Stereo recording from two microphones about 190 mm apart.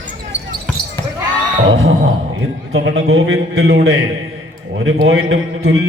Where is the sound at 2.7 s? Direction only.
80° right.